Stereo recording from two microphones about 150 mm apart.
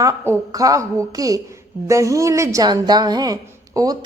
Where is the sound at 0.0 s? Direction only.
20° right (ahead or behind).